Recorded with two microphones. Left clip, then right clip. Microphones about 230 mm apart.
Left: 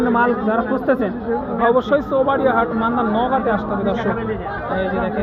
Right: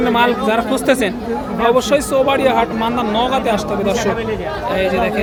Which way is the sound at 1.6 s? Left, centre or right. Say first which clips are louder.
Right 3 dB; centre.